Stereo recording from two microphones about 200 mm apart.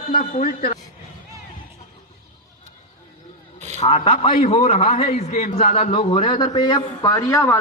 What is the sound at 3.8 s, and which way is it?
A man's voice, 30° left (ahead or behind).